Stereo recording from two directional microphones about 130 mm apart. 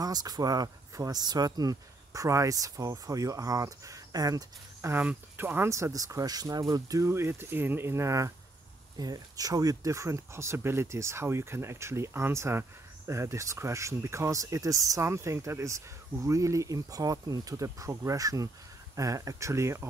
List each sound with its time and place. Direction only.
0.0 s speech: 30° right (ahead or behind)